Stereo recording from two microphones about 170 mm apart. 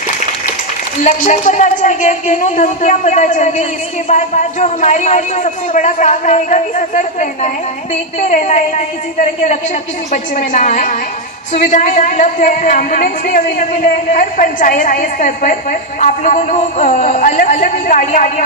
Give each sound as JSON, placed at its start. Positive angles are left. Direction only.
{"t": 1.0, "sound": "a woman's voice", "side_deg": 45}
{"t": 10.1, "sound": "a woman's voice", "side_deg": 45}